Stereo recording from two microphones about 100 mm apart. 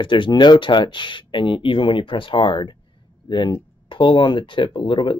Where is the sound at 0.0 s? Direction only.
55° left (ahead or behind).